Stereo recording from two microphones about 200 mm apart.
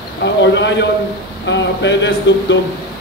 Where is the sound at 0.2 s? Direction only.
65° left (ahead or behind).